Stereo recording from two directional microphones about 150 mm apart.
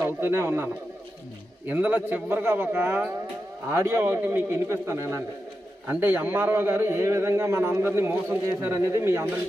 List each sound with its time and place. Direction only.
0.0 s a man's voice: 15° right (ahead or behind)
1.7 s a man's voice: 10° right (ahead or behind)